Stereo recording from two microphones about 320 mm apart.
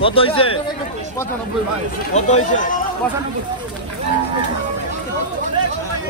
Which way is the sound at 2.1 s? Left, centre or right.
Left.